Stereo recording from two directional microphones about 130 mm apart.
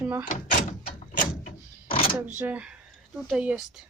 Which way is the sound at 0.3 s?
75° left (ahead or behind).